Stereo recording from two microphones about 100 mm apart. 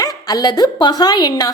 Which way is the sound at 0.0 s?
40° left (ahead or behind).